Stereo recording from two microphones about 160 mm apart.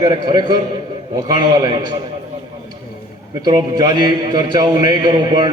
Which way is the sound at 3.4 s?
25° right (ahead or behind).